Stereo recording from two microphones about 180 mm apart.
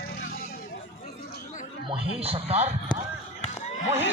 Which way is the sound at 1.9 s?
30° right (ahead or behind).